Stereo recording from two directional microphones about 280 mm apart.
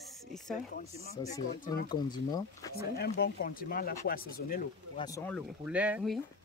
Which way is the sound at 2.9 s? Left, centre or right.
Left.